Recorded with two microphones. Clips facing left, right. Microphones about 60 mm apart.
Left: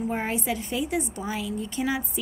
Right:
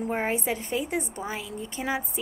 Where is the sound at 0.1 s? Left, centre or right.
Right.